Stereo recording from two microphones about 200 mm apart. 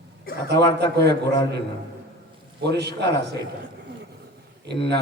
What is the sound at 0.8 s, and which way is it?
Speech, 55° right (ahead or behind).